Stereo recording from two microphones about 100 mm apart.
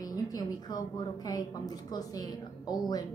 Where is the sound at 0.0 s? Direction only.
40° left (ahead or behind).